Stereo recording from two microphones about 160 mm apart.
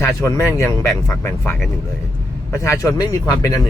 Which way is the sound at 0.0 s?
15° left (ahead or behind).